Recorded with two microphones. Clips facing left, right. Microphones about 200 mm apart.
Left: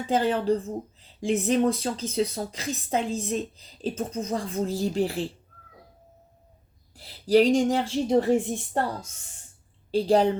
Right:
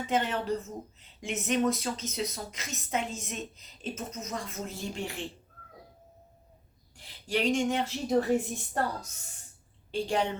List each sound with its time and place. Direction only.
0.1 s speech: 30° left (ahead or behind)
6.9 s speech: 35° left (ahead or behind)